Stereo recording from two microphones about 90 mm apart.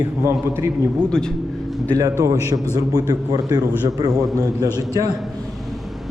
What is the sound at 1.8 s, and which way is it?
A man's voice, 45° right (ahead or behind).